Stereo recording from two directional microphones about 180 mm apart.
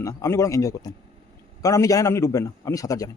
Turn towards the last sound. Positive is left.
turn(degrees=20)  # may be behind; listen again after turning